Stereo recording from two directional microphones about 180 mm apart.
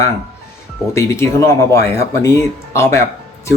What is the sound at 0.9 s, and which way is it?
Speech, 15° left (ahead or behind).